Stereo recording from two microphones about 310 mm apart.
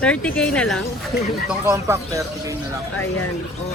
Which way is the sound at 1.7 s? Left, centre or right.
Centre.